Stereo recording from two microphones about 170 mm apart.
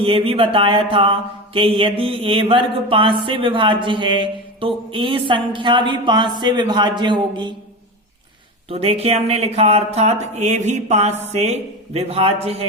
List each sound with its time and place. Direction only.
0.0 s speech: 35° right (ahead or behind)
8.7 s speech: 35° right (ahead or behind)